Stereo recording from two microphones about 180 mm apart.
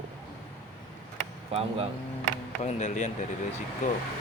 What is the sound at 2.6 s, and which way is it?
Speech, 40° left (ahead or behind).